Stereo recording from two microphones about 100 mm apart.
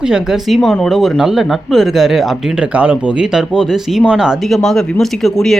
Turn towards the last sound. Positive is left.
turn(degrees=5)  # may be behind; listen again after turning